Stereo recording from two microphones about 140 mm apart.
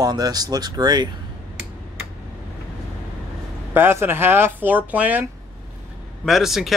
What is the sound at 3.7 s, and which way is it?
Speech, 15° right (ahead or behind).